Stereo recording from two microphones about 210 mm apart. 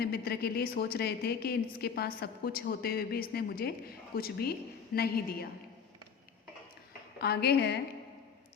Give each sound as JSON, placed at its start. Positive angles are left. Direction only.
{"t": 0.0, "sound": "a woman's voice", "side_deg": 50}
{"t": 7.2, "sound": "a woman's voice", "side_deg": 50}